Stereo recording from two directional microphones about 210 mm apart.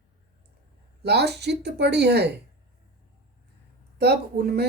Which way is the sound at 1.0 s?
50° right (ahead or behind).